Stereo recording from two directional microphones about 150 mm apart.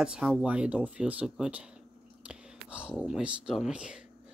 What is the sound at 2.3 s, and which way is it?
Whispering, 5° right (ahead or behind).